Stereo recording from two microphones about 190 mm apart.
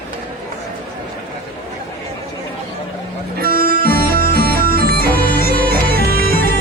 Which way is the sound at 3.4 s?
50° right (ahead or behind).